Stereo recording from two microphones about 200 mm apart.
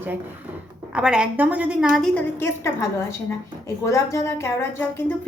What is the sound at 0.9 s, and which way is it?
A woman's voice, 5° right (ahead or behind).